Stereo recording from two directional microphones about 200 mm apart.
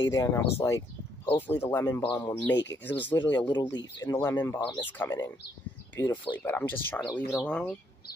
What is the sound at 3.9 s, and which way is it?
Speech, 15° left (ahead or behind).